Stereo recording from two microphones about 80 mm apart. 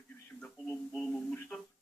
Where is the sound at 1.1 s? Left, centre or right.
Centre.